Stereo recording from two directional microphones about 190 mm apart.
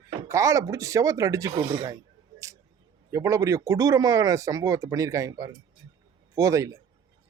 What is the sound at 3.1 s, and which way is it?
A man's voice, 15° right (ahead or behind).